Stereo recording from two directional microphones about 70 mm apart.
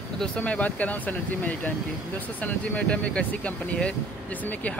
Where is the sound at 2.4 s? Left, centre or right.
Centre.